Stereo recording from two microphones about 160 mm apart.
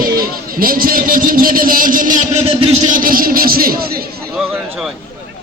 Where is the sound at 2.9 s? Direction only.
60° right (ahead or behind).